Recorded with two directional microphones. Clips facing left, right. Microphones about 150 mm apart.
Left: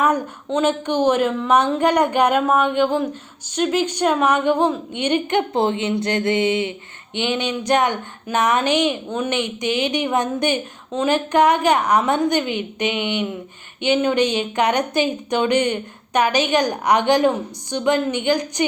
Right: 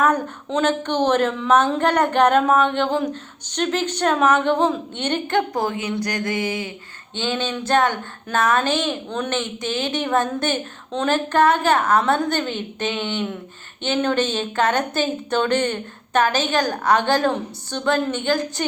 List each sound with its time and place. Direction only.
0.0 s a woman's voice: 10° left (ahead or behind)